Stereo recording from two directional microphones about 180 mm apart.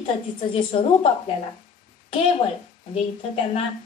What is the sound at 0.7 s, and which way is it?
Speech, 35° left (ahead or behind).